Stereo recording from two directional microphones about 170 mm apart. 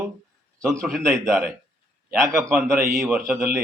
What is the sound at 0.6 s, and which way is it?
Speech, centre (ahead or behind).